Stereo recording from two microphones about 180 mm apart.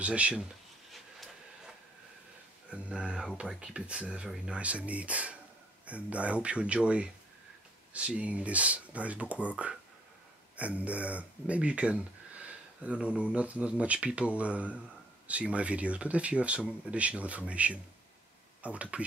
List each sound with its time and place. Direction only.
0.0 s speech: 5° right (ahead or behind)
2.7 s speech: 5° right (ahead or behind)